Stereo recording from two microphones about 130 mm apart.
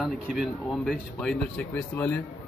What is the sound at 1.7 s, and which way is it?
Speech, 10° left (ahead or behind).